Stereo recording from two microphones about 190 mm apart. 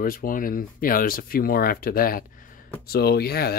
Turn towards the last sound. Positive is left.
turn(degrees=55)  # may be behind; listen again after turning